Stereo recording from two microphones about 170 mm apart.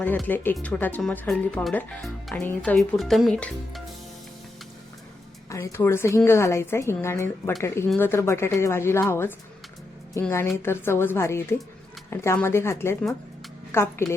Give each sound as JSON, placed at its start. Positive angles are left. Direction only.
{"t": 0.3, "sound": "a woman's voice", "side_deg": 10}
{"t": 5.5, "sound": "a woman's voice", "side_deg": 15}